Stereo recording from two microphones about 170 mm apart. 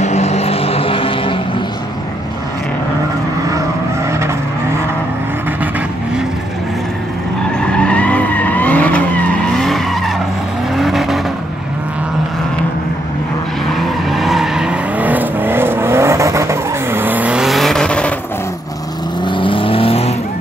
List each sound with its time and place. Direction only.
0.0 s vehicle: 40° left (ahead or behind)
7.6 s vehicle: 5° left (ahead or behind)
13.7 s vehicle: centre (ahead or behind)
19.2 s vehicle: 30° left (ahead or behind)